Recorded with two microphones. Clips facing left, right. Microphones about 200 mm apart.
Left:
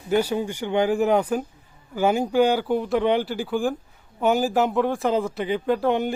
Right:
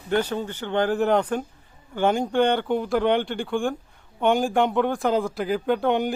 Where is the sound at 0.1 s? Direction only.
10° left (ahead or behind).